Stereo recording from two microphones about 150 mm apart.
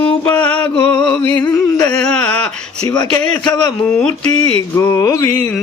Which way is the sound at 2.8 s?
25° left (ahead or behind).